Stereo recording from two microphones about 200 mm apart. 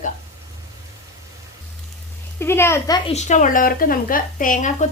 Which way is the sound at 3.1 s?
35° left (ahead or behind).